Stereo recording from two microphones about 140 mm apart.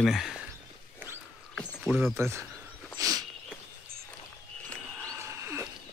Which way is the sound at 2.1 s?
20° right (ahead or behind).